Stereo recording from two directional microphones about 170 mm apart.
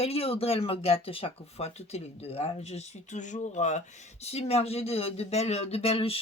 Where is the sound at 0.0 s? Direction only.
35° left (ahead or behind).